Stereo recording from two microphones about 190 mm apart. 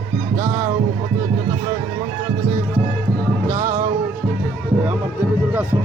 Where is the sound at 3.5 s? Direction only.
15° right (ahead or behind).